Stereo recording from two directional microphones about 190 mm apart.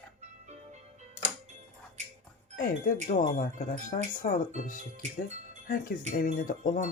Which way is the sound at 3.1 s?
45° left (ahead or behind).